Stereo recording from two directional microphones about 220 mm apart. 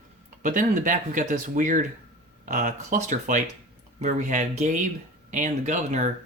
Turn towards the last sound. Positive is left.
turn(degrees=-35)  # may be behind; listen again after turning